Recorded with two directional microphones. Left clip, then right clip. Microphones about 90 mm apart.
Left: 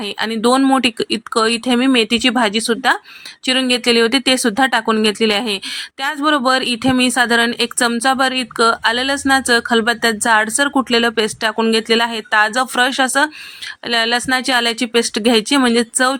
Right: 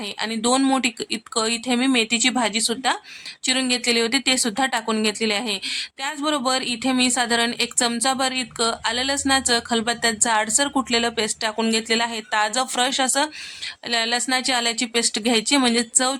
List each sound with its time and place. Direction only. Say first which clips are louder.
0.0 s a woman's voice: left 7 dB; 35° left (ahead or behind)